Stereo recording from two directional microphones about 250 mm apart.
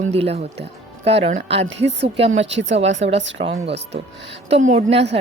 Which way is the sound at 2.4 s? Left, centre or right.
Right.